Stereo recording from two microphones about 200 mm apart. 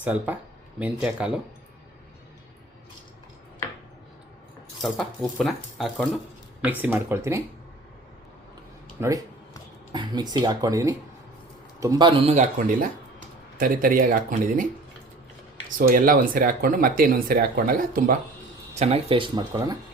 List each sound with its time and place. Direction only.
0.0 s speech: 5° right (ahead or behind)
4.8 s speech: centre (ahead or behind)
9.0 s speech: 15° right (ahead or behind); by 14.7 s 40° right (ahead or behind)
15.8 s speech: 45° right (ahead or behind)
18.7 s speech: 30° right (ahead or behind)